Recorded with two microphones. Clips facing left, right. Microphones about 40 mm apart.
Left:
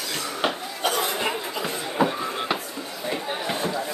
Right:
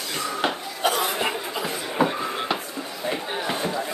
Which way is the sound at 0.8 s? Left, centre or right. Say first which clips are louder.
Right 1 dB; centre.